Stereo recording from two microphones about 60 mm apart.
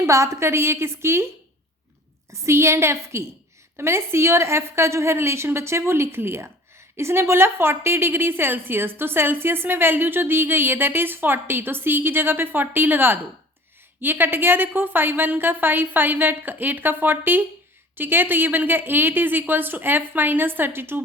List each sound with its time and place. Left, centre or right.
0.1 s a woman's voice: right
2.3 s a woman's voice: right